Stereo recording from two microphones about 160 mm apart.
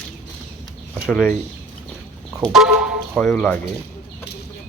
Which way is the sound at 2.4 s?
Centre (ahead or behind).